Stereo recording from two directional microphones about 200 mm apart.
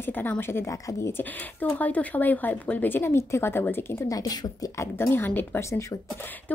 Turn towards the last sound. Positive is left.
turn(degrees=15)  # may be behind; listen again after turning